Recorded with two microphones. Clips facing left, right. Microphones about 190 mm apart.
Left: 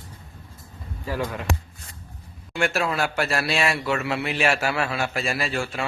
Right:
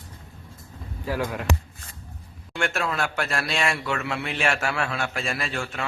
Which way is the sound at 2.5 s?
5° left (ahead or behind).